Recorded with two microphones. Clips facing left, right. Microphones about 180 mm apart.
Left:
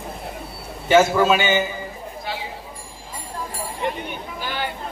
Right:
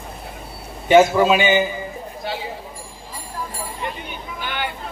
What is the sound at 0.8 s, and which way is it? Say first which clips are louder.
Speech: right 2 dB; 15° right (ahead or behind).